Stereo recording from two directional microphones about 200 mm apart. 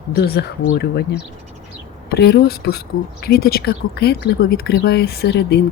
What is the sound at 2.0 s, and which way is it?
Speech, 55° left (ahead or behind).